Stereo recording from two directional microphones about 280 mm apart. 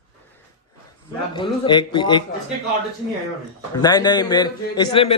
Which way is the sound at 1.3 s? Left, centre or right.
Centre.